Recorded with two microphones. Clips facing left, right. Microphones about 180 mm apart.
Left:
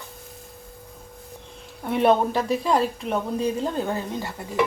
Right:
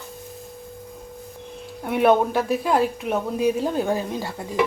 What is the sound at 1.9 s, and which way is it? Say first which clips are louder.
Speech: right 1 dB; 5° right (ahead or behind).